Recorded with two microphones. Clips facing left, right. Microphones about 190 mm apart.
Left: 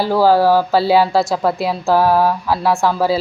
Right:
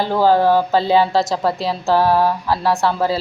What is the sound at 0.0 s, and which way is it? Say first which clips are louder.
Speech: left 2 dB; 10° left (ahead or behind).